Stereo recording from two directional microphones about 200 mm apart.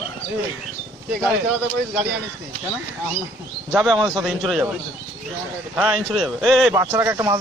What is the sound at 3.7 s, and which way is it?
Speech, centre (ahead or behind).